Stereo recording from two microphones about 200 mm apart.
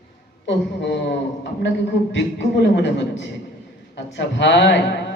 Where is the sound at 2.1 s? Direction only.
60° left (ahead or behind).